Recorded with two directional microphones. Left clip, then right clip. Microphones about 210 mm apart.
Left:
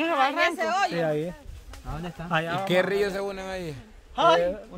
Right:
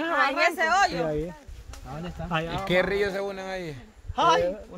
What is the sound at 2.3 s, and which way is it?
Speech, 55° left (ahead or behind).